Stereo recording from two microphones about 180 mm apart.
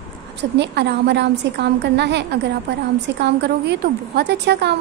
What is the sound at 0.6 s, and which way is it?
A woman's voice, 70° right (ahead or behind).